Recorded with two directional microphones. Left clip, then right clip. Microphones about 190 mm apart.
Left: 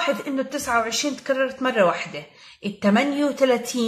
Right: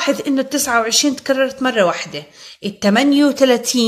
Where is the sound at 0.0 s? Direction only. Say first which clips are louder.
Right 6 dB; 40° right (ahead or behind).